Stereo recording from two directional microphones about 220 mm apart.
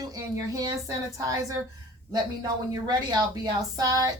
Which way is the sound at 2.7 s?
20° right (ahead or behind).